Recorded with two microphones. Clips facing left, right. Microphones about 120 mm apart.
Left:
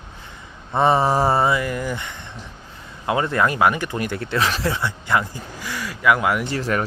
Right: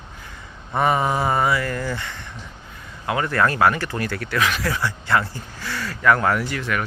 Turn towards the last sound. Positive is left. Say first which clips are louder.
# left 3 dB
turn(degrees=35)  # may be behind; listen again after turning